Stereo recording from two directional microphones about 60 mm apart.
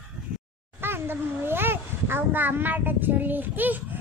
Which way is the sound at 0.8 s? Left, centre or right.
Right.